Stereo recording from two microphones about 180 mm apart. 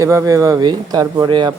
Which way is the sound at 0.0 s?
15° right (ahead or behind).